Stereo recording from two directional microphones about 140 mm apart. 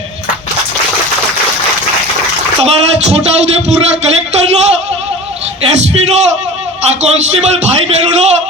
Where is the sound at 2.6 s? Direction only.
50° right (ahead or behind).